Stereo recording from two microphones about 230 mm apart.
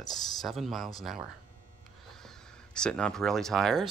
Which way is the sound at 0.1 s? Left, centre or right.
Centre.